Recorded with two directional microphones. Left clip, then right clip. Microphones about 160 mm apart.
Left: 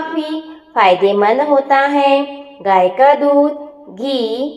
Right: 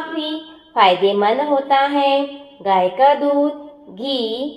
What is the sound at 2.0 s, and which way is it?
A woman's voice, 15° left (ahead or behind).